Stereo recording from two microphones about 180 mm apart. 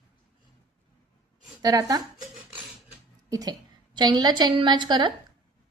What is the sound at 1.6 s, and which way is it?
Speech, 20° right (ahead or behind).